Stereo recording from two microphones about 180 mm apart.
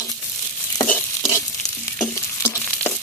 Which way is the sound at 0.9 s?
15° left (ahead or behind).